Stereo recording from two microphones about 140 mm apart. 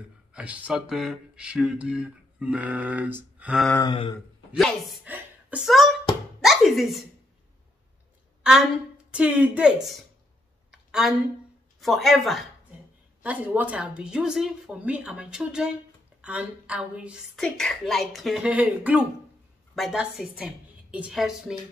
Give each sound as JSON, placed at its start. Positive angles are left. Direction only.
{"t": 0.3, "sound": "speech", "side_deg": -10}
{"t": 3.8, "sound": "speech", "side_deg": 35}
{"t": 4.6, "sound": "speech", "side_deg": 5}
{"t": 5.0, "sound": "chuckle", "side_deg": -10}
{"t": 5.6, "sound": "speech", "side_deg": 0}
{"t": 9.1, "sound": "speech", "side_deg": -10}
{"t": 10.7, "sound": "a sound", "side_deg": 0}
{"t": 11.8, "sound": "speech", "side_deg": 0}
{"t": 17.4, "sound": "a woman's voice", "side_deg": 5}